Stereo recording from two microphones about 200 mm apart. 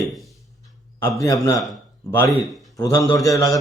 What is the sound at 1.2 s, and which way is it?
Speech, 15° left (ahead or behind).